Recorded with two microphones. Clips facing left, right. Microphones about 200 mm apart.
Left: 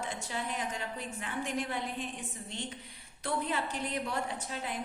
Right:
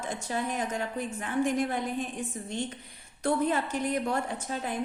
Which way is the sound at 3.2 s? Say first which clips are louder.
Right 7 dB; 45° right (ahead or behind).